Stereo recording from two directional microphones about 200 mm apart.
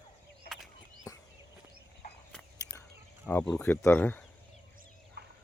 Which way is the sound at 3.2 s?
5° left (ahead or behind).